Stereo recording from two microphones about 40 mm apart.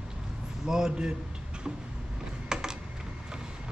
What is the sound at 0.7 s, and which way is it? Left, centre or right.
Speech, centre.